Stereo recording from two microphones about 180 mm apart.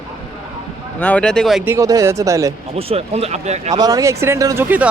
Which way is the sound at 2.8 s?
35° right (ahead or behind).